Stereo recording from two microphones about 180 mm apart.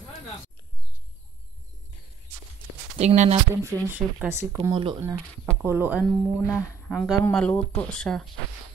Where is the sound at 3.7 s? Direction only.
20° right (ahead or behind).